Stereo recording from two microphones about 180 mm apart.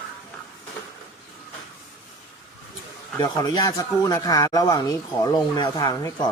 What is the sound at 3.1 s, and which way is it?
Speech, 20° left (ahead or behind).